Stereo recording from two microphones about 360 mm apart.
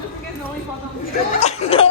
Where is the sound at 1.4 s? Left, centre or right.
Centre.